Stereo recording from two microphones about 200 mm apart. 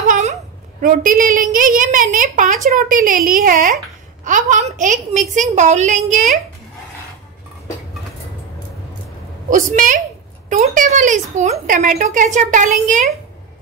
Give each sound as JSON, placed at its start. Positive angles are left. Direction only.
{"t": 0.1, "sound": "a woman's voice", "side_deg": -35}
{"t": 9.5, "sound": "a woman's voice", "side_deg": -40}